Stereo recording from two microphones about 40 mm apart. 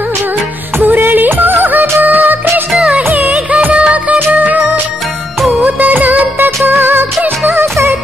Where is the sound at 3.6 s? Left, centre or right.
Right.